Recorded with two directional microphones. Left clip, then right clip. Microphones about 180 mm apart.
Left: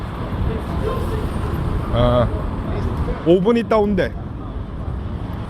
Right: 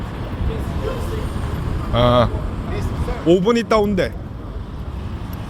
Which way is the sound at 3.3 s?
20° right (ahead or behind).